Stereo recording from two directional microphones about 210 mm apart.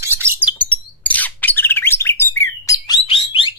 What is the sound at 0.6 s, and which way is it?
Bird, 5° left (ahead or behind).